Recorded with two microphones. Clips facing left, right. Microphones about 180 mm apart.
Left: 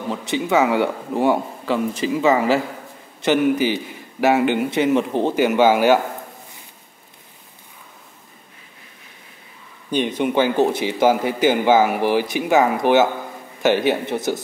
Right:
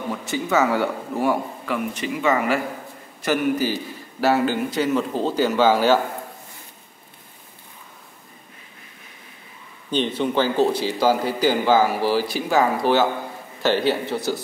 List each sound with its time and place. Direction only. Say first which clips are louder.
0.1 s a man's voice: left 3 dB; 15° left (ahead or behind)
9.8 s a man's voice: left 2 dB; 15° left (ahead or behind)